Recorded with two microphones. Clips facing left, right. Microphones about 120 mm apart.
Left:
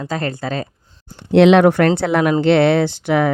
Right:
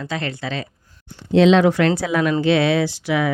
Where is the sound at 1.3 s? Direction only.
65° left (ahead or behind).